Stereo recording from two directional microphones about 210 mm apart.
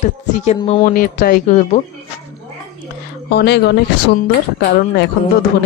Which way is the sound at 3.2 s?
50° left (ahead or behind).